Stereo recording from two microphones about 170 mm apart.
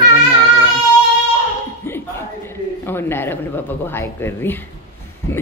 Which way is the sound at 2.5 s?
15° left (ahead or behind).